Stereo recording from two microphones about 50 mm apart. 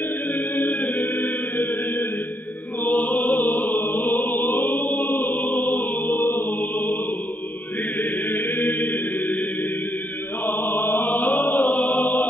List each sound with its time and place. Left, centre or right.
0.6 s music: left
8.0 s chant: left
10.4 s music: left